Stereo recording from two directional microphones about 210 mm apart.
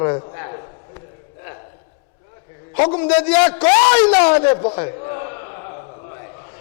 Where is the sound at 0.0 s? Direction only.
25° left (ahead or behind).